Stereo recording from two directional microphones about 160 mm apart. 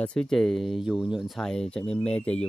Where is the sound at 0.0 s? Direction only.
5° left (ahead or behind).